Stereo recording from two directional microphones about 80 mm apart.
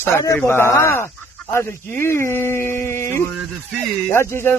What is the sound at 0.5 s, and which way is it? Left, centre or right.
Speech, left.